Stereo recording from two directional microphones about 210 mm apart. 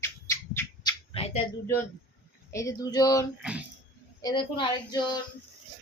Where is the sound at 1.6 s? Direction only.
10° left (ahead or behind).